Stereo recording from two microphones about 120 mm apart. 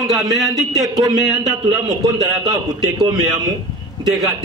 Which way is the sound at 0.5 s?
30° right (ahead or behind).